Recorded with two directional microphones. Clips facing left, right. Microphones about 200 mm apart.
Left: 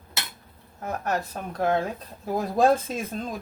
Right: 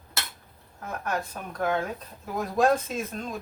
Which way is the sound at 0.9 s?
35° left (ahead or behind).